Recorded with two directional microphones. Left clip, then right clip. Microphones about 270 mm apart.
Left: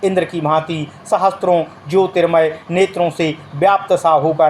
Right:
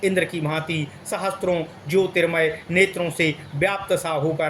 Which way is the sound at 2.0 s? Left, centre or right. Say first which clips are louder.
Left 7 dB; centre.